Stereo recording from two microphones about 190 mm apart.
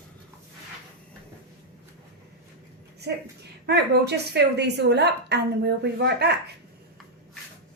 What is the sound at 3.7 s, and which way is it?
A woman's voice, 60° right (ahead or behind).